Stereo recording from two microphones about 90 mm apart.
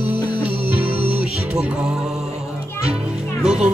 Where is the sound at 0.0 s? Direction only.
20° right (ahead or behind).